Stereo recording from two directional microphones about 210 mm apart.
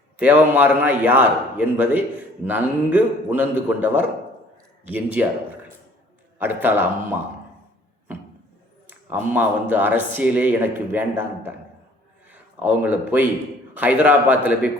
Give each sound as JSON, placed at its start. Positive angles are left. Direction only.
{"t": 0.2, "sound": "a man's voice", "side_deg": -5}
{"t": 6.4, "sound": "a man's voice", "side_deg": -10}
{"t": 8.9, "sound": "a man's voice", "side_deg": -10}